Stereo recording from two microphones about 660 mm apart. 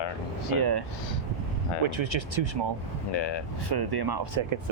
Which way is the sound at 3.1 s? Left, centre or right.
Left.